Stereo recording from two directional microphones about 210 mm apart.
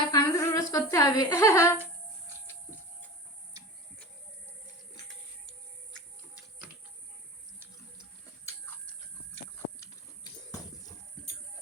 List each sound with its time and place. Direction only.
0.1 s humming: 15° left (ahead or behind)